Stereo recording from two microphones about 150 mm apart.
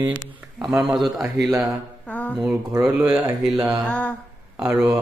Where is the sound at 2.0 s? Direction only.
10° left (ahead or behind).